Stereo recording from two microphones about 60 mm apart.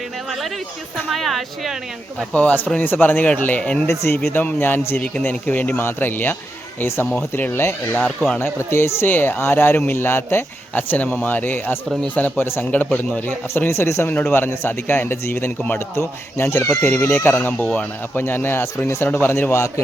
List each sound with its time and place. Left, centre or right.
1.1 s a woman's voice: centre
2.3 s speech: left
3.6 s speech: centre
3.8 s speech: left
10.8 s speech: left
13.5 s speech: left
14.1 s speech: left